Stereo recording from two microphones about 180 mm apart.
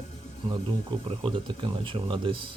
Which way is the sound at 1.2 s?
30° right (ahead or behind).